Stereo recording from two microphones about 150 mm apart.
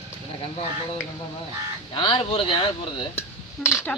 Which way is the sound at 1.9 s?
35° left (ahead or behind).